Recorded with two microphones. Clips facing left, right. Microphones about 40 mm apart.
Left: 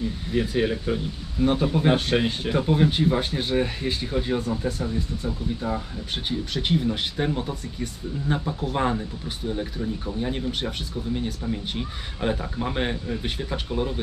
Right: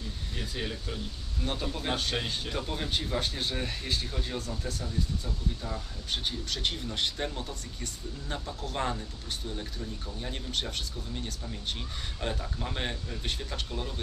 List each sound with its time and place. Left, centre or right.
0.0 s speech: left